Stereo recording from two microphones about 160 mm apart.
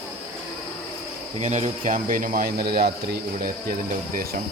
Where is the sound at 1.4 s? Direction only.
45° right (ahead or behind); by 3.2 s 75° right (ahead or behind).